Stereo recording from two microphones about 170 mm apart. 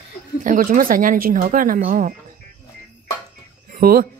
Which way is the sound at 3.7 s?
60° right (ahead or behind).